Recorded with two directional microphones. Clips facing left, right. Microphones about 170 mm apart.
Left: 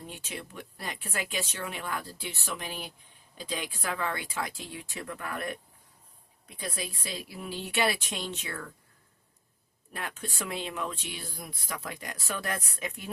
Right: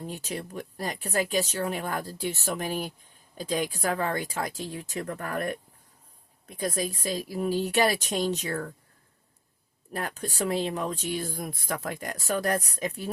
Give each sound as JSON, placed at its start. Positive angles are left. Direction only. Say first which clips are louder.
{"t": 0.0, "sound": "speech", "louder": "right 6 dB", "side_deg": -40}
{"t": 9.9, "sound": "speech", "louder": "right 5 dB", "side_deg": -40}